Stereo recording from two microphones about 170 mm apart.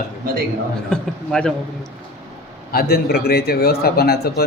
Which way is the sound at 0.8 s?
5° left (ahead or behind).